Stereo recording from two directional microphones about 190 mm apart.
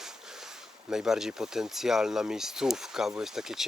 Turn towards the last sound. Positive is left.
turn(degrees=0)  # may be behind; listen again after turning